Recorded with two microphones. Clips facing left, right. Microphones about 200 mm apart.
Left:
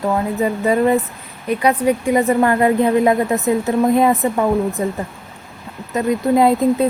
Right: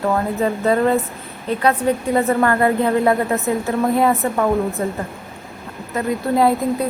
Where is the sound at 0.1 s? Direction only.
10° left (ahead or behind).